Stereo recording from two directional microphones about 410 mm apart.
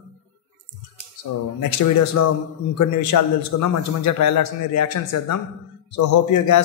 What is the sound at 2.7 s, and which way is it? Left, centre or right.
A man's voice, left.